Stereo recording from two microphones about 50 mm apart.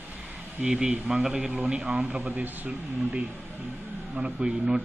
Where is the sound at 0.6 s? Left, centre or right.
Centre.